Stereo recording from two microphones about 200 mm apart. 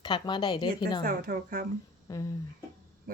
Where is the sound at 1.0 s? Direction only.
45° right (ahead or behind).